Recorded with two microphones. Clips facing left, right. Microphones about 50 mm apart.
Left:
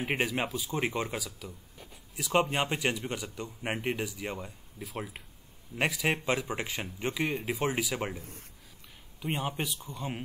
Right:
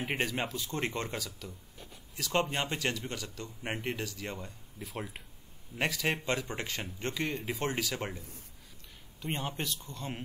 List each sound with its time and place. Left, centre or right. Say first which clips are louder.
0.0 s speech: left 3 dB; centre
4.7 s speech: left 2 dB; centre
8.2 s speech: left 3 dB; left
9.2 s speech: left 3 dB; centre